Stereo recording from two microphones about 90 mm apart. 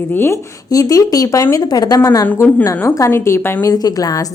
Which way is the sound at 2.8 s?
30° left (ahead or behind).